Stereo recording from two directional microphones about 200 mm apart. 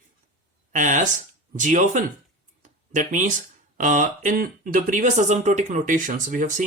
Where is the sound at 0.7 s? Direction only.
40° right (ahead or behind).